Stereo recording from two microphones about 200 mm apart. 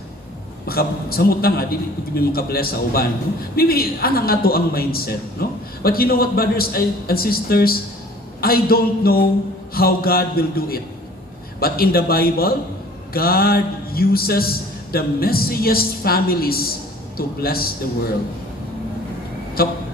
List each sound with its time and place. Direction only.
0.7 s a woman's voice: 50° left (ahead or behind)
19.6 s a woman's voice: 50° left (ahead or behind)